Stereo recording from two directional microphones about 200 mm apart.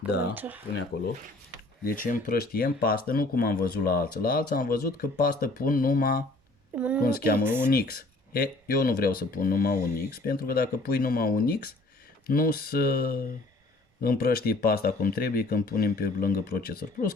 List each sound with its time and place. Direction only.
0.3 s speech: 10° right (ahead or behind)
1.8 s speech: 45° left (ahead or behind)
6.7 s speech: 5° right (ahead or behind)
7.0 s speech: 45° left (ahead or behind)
7.3 s speech: 10° right (ahead or behind)
7.7 s speech: 50° left (ahead or behind)